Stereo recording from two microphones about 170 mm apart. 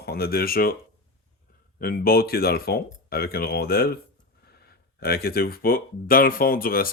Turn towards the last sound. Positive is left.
turn(degrees=60)  # may be behind; listen again after turning